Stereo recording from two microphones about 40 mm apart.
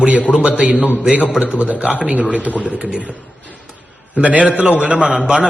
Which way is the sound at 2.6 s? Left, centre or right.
Right.